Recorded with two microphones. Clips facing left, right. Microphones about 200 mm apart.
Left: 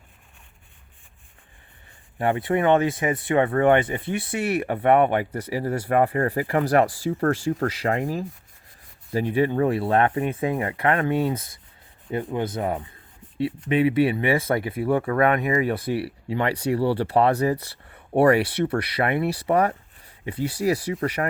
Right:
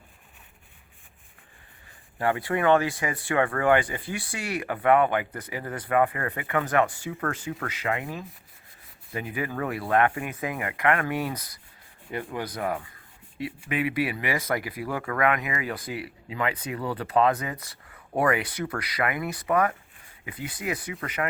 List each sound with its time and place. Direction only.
2.1 s speech: 25° left (ahead or behind)